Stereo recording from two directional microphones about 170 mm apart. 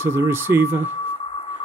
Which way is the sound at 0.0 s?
15° right (ahead or behind).